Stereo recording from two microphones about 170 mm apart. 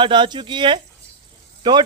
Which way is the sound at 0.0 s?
30° right (ahead or behind).